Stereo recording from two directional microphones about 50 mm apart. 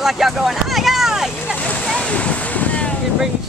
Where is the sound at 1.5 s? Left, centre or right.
Left.